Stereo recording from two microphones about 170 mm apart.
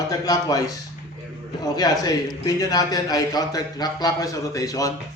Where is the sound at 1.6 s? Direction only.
20° left (ahead or behind).